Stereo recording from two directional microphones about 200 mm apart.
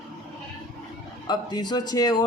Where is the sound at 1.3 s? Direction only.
20° left (ahead or behind).